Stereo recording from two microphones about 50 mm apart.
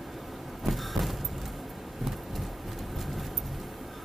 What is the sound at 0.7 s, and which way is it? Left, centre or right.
Vehicle, centre.